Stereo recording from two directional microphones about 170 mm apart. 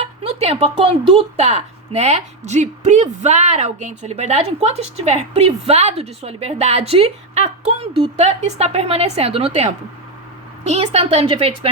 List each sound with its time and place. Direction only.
0.0 s speech: 40° right (ahead or behind)